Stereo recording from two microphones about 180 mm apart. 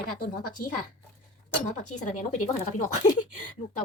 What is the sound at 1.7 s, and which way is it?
A woman's voice, 40° left (ahead or behind).